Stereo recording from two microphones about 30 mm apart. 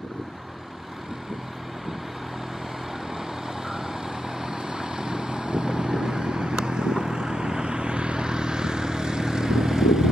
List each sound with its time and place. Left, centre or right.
4.4 s vehicle: right